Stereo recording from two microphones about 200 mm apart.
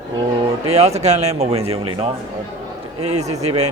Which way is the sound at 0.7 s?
30° right (ahead or behind).